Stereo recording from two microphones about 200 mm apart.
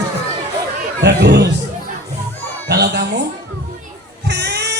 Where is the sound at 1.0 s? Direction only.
55° right (ahead or behind).